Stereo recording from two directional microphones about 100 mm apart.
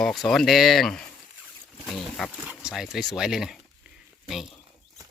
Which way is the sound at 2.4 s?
5° right (ahead or behind).